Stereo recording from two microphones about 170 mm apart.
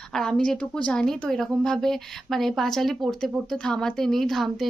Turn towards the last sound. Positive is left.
turn(degrees=0)  # may be behind; listen again after turning